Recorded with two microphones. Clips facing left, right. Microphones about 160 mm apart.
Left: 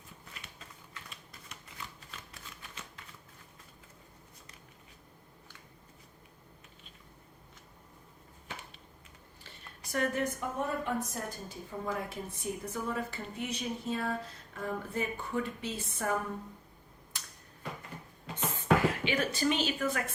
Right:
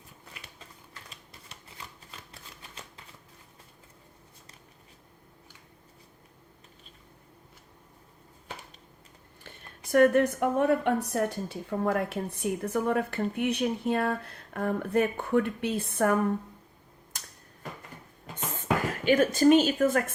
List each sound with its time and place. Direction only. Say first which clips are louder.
9.9 s a woman's voice: right 11 dB; 60° right (ahead or behind)
17.1 s a sound: right 2 dB; 45° right (ahead or behind)
18.5 s speech: left 1 dB; 45° right (ahead or behind)